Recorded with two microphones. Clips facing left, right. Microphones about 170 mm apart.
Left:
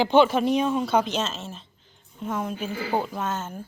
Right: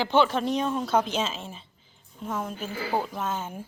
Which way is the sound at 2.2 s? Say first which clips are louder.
Left 3 dB; centre (ahead or behind).